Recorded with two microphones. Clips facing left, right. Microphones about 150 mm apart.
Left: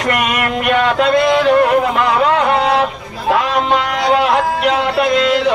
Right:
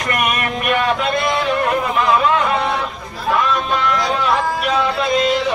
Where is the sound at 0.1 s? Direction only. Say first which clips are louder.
Left 2 dB; 90° left.